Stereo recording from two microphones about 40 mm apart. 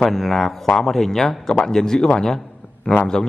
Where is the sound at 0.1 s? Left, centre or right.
Centre.